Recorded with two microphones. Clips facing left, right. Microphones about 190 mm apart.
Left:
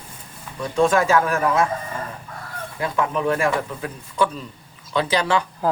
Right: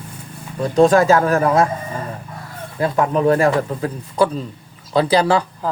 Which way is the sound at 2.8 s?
40° right (ahead or behind).